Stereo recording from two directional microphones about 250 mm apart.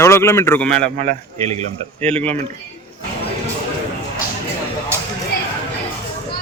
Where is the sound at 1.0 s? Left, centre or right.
Right.